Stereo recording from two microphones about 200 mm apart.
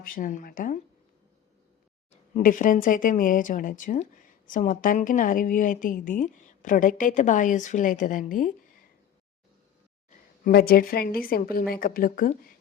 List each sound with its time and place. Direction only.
0.0 s a woman's voice: 45° left (ahead or behind)
2.3 s speech: 40° left (ahead or behind)
10.4 s a woman's voice: 50° left (ahead or behind)